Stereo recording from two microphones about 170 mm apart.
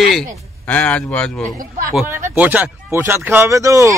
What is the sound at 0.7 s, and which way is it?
Speech, 5° left (ahead or behind).